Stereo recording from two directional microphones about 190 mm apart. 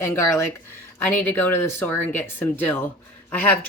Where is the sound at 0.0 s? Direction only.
15° left (ahead or behind).